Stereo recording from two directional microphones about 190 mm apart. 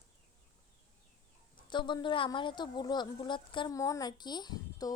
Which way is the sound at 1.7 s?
25° left (ahead or behind).